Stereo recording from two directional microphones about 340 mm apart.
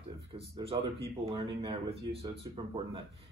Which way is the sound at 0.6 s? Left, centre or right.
Centre.